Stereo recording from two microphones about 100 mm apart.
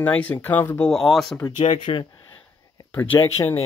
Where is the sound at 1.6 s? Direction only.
60° left (ahead or behind).